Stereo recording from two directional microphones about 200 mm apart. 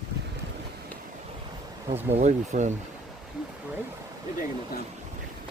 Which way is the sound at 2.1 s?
35° right (ahead or behind).